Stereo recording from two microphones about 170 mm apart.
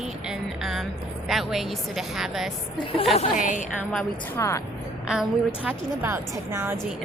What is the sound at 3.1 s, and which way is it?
Speech, 45° left (ahead or behind).